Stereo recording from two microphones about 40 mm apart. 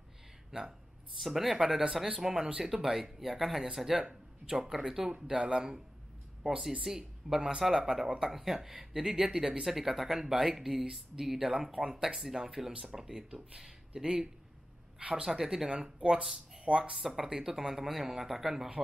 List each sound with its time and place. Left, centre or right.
0.5 s speech: centre
5.2 s speech: right
15.0 s speech: right
15.2 s speech: centre
16.9 s speech: centre